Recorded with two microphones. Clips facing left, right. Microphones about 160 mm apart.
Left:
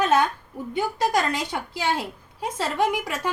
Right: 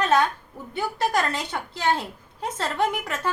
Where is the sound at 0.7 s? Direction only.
15° left (ahead or behind).